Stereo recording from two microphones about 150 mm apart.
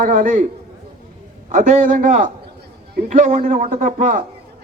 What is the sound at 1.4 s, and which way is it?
A man's voice, 60° right (ahead or behind).